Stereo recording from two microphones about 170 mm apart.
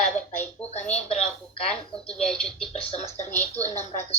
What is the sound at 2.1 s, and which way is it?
Speech, 5° left (ahead or behind).